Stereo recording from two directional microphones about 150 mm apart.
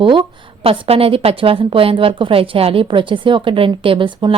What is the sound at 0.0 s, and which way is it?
A woman's voice, 35° right (ahead or behind).